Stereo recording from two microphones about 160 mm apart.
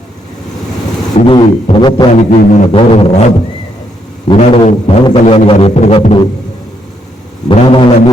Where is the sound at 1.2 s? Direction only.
35° left (ahead or behind).